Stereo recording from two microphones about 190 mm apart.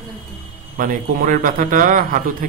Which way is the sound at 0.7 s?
45° right (ahead or behind).